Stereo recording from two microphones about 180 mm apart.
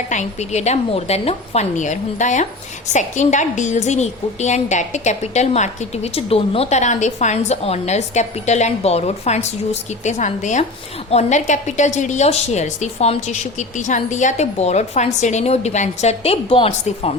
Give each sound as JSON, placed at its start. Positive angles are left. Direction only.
{"t": 0.1, "sound": "a woman's voice", "side_deg": 40}